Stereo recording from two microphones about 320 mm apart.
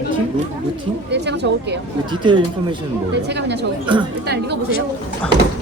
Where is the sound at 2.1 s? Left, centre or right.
Centre.